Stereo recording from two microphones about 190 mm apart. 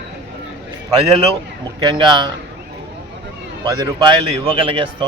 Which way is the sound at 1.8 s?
25° right (ahead or behind).